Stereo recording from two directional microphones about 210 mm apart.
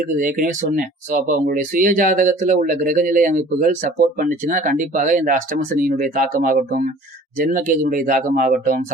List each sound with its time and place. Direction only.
0.2 s speech: 40° right (ahead or behind)